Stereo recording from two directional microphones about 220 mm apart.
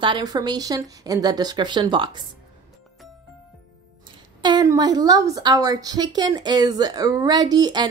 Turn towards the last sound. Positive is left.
turn(degrees=-20)  # may be behind; listen again after turning